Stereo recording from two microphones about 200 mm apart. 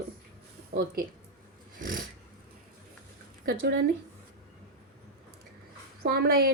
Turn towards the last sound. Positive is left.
turn(degrees=-50)  # may be behind; listen again after turning